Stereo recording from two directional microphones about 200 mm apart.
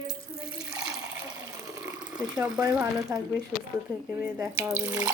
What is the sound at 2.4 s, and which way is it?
Speech, 20° right (ahead or behind).